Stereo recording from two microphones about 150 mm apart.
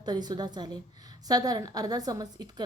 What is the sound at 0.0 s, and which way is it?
Speech, 30° right (ahead or behind).